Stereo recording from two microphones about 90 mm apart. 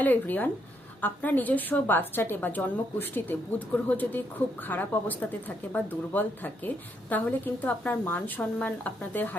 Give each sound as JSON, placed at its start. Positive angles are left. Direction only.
{"t": 0.0, "sound": "a woman's voice", "side_deg": 20}